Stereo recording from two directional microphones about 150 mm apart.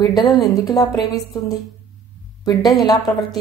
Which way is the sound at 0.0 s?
25° left (ahead or behind).